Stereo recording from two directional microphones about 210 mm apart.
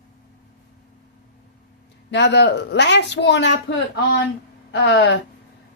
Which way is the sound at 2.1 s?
55° left (ahead or behind).